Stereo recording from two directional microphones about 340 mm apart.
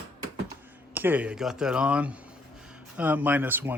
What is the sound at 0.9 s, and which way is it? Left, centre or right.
Speech, centre.